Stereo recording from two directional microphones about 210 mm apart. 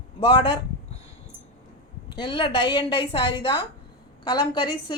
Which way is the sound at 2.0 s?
20° left (ahead or behind).